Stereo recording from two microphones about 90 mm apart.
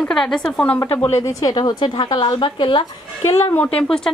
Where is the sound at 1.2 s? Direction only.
40° left (ahead or behind).